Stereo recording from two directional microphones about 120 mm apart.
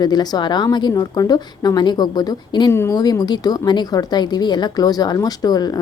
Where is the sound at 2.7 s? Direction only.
25° left (ahead or behind).